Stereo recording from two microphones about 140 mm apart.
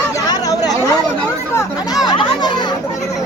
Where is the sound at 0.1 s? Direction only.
25° left (ahead or behind).